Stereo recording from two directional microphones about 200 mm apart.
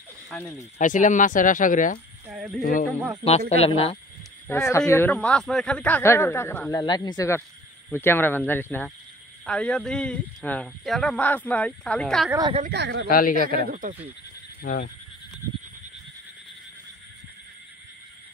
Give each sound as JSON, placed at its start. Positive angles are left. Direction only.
{"t": 0.3, "sound": "speech", "side_deg": 10}
{"t": 0.7, "sound": "speech", "side_deg": 40}
{"t": 2.2, "sound": "speech", "side_deg": 0}
{"t": 2.6, "sound": "speech", "side_deg": 40}
{"t": 4.5, "sound": "speech", "side_deg": 15}
{"t": 6.7, "sound": "speech", "side_deg": 20}
{"t": 12.3, "sound": "speech", "side_deg": -20}
{"t": 12.6, "sound": "speech", "side_deg": -60}
{"t": 13.1, "sound": "speech", "side_deg": 45}
{"t": 13.6, "sound": "speech", "side_deg": -45}
{"t": 14.6, "sound": "speech", "side_deg": 50}